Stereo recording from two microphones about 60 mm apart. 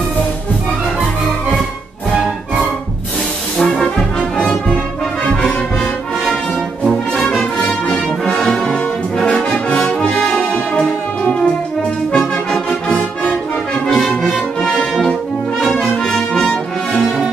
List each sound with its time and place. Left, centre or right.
4.2 s brass instrument: centre
6.8 s brass instrument: centre
8.4 s brass instrument: centre
10.4 s music: centre
12.2 s music: centre
12.8 s brass instrument: centre
13.9 s brass instrument: centre